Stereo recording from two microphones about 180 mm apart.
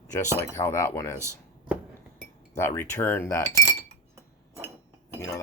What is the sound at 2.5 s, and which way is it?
Speech, 15° left (ahead or behind).